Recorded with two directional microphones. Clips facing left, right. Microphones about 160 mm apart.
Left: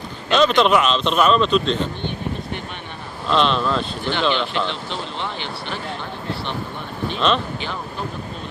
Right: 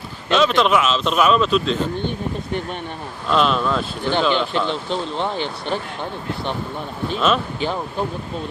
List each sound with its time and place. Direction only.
0.3 s speech: centre (ahead or behind)
3.2 s speech: 5° right (ahead or behind)
4.9 s speech: 45° right (ahead or behind)
7.2 s speech: 5° right (ahead or behind)